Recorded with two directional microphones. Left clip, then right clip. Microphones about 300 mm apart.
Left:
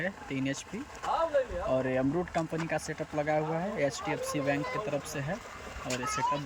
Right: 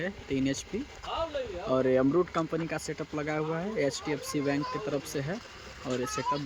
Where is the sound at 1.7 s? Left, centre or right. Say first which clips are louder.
Right 5 dB; centre.